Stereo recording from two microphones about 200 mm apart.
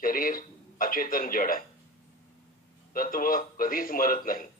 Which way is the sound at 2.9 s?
45° left (ahead or behind).